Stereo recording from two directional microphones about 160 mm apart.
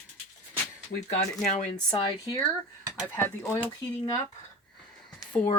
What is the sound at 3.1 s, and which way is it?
Speech, 15° left (ahead or behind).